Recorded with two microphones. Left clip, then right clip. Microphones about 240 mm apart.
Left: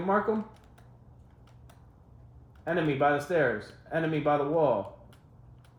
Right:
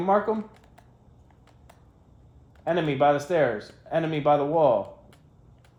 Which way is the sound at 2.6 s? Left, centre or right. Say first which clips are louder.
Right 4 dB; right.